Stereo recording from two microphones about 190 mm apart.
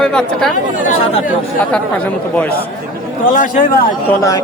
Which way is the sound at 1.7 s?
5° left (ahead or behind).